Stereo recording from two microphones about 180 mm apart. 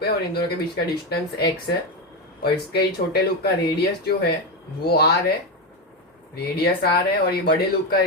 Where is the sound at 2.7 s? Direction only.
65° left (ahead or behind).